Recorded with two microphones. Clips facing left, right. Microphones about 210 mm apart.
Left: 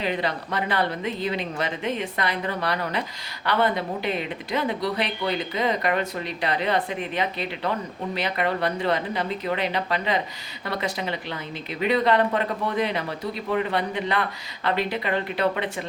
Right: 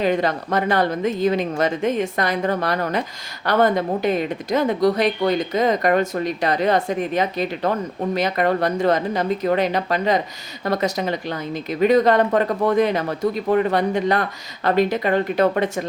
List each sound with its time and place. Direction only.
0.0 s speech: 45° right (ahead or behind)